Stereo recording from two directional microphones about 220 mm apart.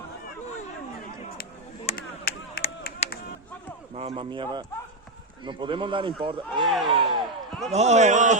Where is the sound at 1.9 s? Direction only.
45° left (ahead or behind).